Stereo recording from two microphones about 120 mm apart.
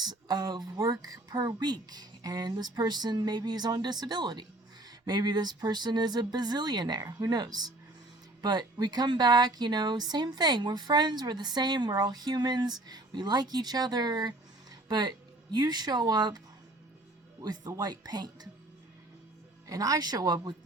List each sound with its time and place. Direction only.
0.0 s speech: 35° right (ahead or behind)
17.4 s speech: 35° right (ahead or behind)
19.6 s speech: 30° right (ahead or behind)